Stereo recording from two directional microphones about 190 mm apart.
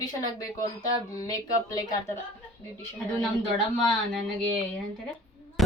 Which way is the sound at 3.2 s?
Centre (ahead or behind).